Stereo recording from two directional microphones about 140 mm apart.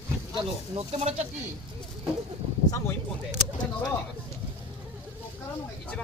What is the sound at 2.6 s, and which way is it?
Speech, 25° left (ahead or behind).